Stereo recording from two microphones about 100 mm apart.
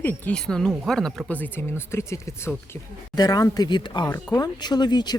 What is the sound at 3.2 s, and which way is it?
Speech, 40° left (ahead or behind).